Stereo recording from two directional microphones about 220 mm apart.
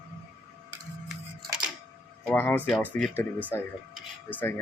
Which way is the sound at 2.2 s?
10° left (ahead or behind).